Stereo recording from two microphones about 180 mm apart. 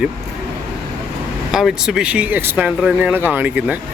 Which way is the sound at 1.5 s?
Centre (ahead or behind).